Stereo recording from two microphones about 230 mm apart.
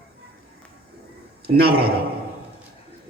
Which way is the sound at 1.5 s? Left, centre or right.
Right.